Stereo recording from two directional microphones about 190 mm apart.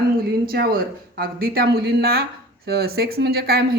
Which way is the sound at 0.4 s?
50° right (ahead or behind).